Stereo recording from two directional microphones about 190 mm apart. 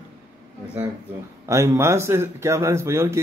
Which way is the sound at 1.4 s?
15° right (ahead or behind).